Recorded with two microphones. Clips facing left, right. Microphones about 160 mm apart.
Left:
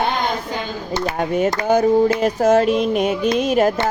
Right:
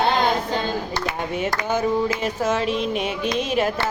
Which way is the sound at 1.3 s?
40° left (ahead or behind).